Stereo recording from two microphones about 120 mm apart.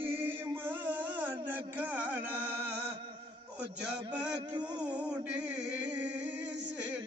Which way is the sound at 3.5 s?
10° right (ahead or behind).